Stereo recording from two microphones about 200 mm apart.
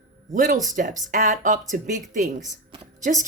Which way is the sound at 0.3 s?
40° right (ahead or behind).